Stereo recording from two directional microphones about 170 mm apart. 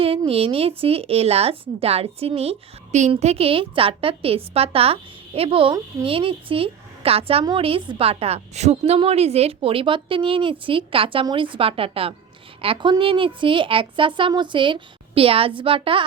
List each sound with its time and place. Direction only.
0.3 s a woman's voice: 35° right (ahead or behind)